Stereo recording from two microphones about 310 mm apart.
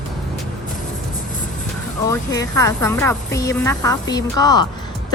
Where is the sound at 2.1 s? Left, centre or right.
Centre.